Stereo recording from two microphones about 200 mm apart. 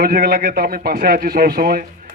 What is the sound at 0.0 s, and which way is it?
Speech, 50° right (ahead or behind).